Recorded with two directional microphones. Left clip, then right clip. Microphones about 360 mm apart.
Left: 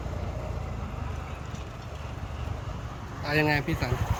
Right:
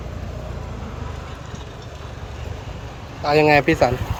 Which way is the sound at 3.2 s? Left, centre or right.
Centre.